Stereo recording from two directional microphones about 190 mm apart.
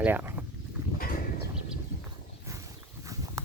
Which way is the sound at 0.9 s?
50° left (ahead or behind).